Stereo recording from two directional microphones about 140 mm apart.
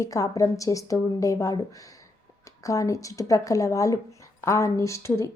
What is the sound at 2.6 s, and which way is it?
A woman's voice, 25° left (ahead or behind).